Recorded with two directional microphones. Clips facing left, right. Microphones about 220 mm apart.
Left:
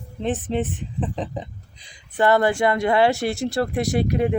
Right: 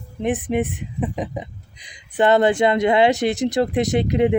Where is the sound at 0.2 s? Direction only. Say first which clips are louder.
Right 3 dB; 15° right (ahead or behind).